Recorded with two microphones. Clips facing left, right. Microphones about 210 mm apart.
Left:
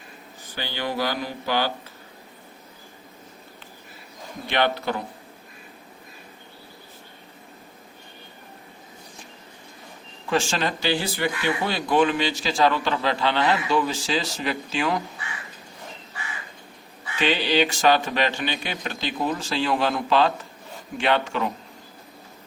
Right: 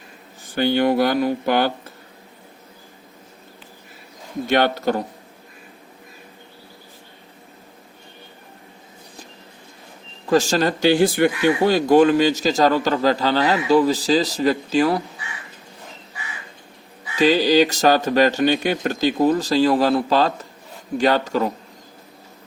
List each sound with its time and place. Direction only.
0.4 s speech: 50° right (ahead or behind)
4.4 s a man's voice: 45° right (ahead or behind)
10.2 s speech: 40° right (ahead or behind)
17.2 s speech: 40° right (ahead or behind)